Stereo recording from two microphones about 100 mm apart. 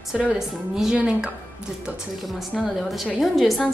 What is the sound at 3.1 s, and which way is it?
Speech, centre (ahead or behind).